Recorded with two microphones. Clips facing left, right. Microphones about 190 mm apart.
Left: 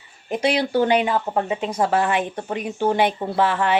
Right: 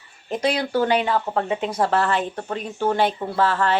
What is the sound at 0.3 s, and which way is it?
Speech, 10° left (ahead or behind).